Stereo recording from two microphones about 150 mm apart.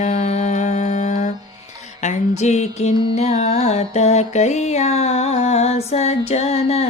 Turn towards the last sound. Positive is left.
turn(degrees=45)  # may be behind; listen again after turning